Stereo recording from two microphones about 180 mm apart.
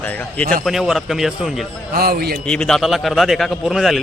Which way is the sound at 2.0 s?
55° right (ahead or behind).